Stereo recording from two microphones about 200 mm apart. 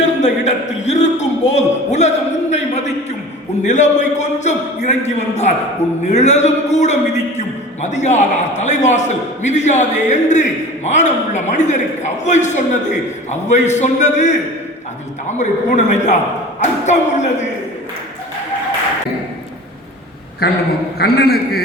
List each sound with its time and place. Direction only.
0.0 s a sound: 35° left (ahead or behind)
3.6 s a man's voice: 35° left (ahead or behind)
21.0 s a man's voice: 50° left (ahead or behind)